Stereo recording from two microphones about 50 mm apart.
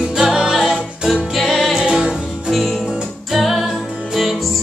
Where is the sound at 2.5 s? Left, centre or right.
Centre.